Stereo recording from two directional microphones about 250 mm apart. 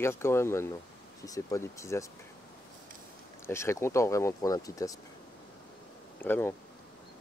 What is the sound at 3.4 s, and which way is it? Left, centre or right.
Speech, centre.